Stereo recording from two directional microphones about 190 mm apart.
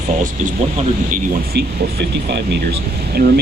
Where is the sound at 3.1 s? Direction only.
55° right (ahead or behind).